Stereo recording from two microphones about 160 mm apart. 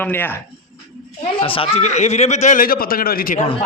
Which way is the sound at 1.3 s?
35° left (ahead or behind).